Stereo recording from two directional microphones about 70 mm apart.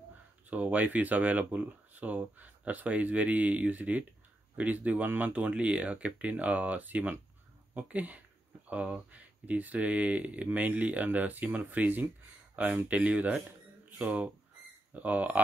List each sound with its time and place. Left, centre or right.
0.5 s speech: right